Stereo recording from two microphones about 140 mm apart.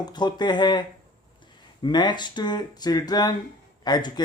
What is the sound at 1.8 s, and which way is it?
Speech, 30° left (ahead or behind).